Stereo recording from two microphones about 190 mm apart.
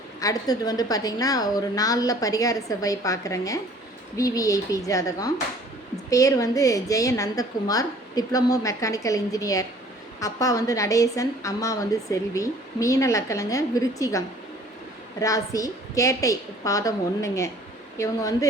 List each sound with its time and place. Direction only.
0.2 s a woman's voice: 20° left (ahead or behind)